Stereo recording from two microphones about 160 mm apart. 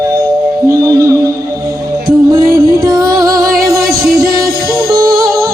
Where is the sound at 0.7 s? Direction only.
20° right (ahead or behind).